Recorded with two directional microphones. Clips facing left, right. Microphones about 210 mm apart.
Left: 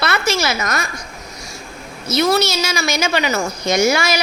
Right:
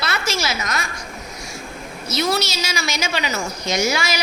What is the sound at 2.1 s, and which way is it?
A woman's voice, 55° left (ahead or behind).